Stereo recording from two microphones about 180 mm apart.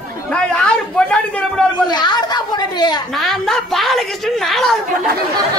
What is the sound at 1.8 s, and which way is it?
A woman's voice, 25° left (ahead or behind).